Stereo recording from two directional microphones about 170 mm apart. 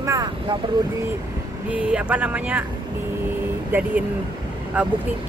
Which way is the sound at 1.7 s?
5° right (ahead or behind).